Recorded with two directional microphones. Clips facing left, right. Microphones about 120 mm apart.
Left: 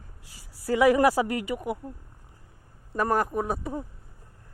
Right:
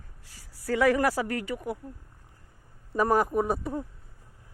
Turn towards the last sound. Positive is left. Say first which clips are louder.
# right 2 dB
turn(degrees=0)  # may be behind; listen again after turning